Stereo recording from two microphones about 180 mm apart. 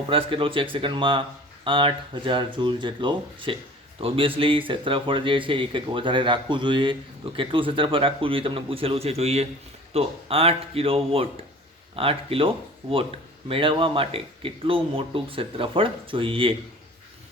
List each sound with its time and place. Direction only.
0.1 s speech: 30° right (ahead or behind)